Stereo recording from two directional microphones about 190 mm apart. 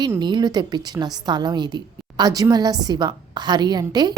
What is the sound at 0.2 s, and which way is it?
A woman's voice, 25° right (ahead or behind).